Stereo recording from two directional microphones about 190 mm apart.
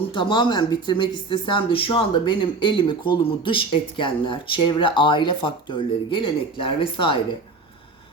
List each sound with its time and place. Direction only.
0.1 s speech: 25° left (ahead or behind)